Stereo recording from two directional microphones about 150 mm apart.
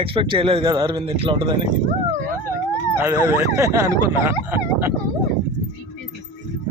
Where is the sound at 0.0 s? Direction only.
35° right (ahead or behind).